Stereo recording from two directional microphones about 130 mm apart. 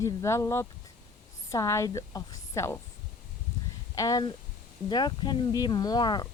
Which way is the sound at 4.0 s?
30° left (ahead or behind).